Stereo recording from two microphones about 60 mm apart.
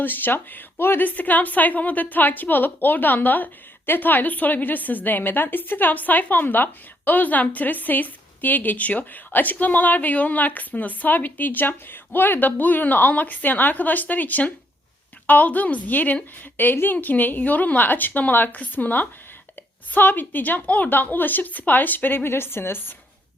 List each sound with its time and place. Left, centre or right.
0.0 s a woman's voice: left